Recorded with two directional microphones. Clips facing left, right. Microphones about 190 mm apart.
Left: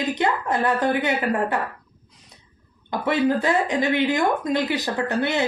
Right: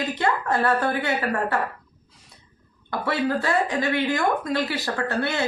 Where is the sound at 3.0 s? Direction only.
20° left (ahead or behind).